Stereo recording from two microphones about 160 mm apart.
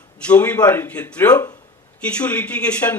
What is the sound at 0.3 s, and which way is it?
A man's voice, 10° left (ahead or behind).